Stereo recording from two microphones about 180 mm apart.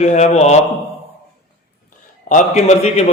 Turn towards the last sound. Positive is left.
turn(degrees=40)  # may be behind; listen again after turning